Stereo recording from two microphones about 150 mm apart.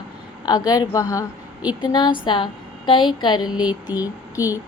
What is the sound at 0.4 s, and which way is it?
A woman's voice, 25° left (ahead or behind).